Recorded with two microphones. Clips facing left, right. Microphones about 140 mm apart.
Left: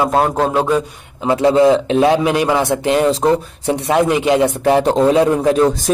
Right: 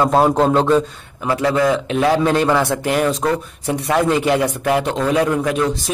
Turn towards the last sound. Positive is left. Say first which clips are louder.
# left 5 dB
turn(degrees=30)  # may be behind; listen again after turning